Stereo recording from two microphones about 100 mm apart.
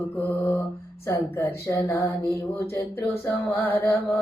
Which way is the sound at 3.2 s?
25° left (ahead or behind).